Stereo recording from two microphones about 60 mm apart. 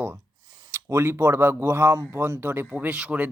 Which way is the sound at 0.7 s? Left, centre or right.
Right.